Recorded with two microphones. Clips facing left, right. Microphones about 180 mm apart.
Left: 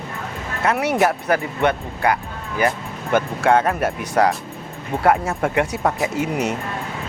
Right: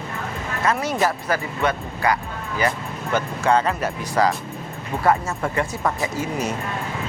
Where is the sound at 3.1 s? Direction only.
55° left (ahead or behind).